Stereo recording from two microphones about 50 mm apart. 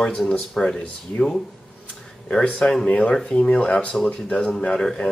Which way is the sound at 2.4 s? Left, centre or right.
Left.